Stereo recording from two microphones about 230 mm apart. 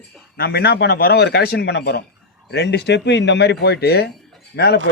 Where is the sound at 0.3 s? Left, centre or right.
Left.